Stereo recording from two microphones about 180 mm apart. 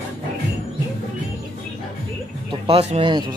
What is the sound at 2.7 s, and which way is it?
Speech, 35° right (ahead or behind).